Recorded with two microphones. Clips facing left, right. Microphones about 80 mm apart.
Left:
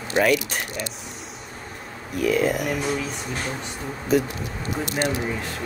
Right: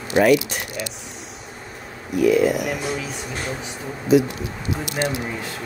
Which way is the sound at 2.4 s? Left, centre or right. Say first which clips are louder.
Right 3 dB; left.